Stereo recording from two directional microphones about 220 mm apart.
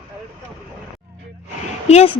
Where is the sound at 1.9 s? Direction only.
30° left (ahead or behind).